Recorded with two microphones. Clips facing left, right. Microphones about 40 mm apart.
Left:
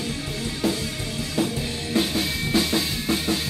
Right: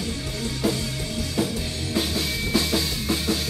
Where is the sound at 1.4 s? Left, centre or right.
Left.